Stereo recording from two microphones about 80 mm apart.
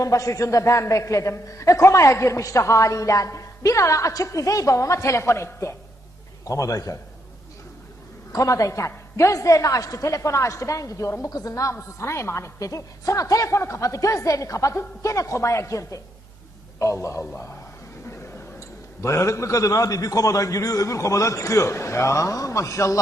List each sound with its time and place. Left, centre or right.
0.0 s a man's voice: left
8.3 s a man's voice: left
19.0 s a man's voice: left